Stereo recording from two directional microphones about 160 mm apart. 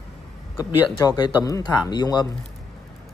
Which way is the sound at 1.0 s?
25° left (ahead or behind).